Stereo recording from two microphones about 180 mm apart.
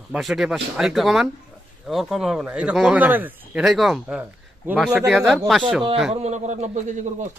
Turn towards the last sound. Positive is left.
turn(degrees=-40)  # may be behind; listen again after turning